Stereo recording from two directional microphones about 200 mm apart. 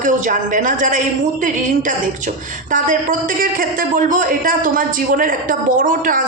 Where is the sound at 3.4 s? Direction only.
45° right (ahead or behind).